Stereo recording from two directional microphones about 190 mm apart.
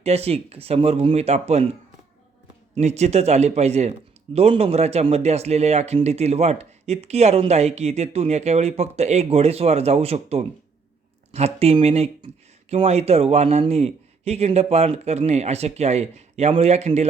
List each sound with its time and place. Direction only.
0.0 s speech: 35° right (ahead or behind)
2.7 s speech: 35° right (ahead or behind)